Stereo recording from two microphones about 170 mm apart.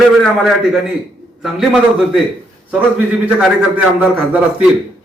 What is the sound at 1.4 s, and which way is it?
Speech, centre (ahead or behind).